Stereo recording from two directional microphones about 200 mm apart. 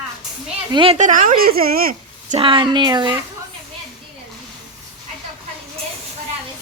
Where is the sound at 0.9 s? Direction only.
40° right (ahead or behind).